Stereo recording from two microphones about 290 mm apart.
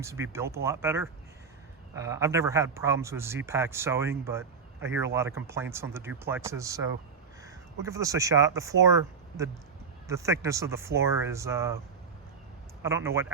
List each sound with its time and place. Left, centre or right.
0.0 s speech: centre
12.8 s speech: centre